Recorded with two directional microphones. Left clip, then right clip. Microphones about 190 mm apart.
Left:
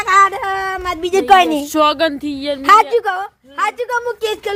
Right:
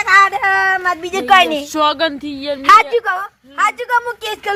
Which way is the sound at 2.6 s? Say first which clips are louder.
Right 1 dB; 70° left (ahead or behind).